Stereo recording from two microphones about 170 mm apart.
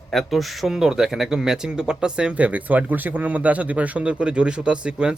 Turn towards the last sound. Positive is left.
turn(degrees=-5)  # may be behind; listen again after turning